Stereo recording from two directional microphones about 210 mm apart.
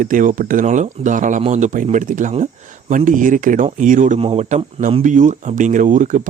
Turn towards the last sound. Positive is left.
turn(degrees=-35)  # may be behind; listen again after turning